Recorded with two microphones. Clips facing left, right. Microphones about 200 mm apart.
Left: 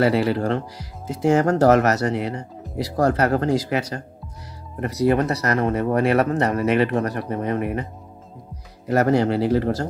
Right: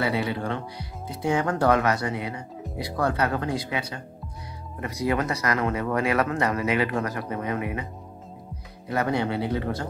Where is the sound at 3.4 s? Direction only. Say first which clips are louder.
Left 7 dB; 90° left.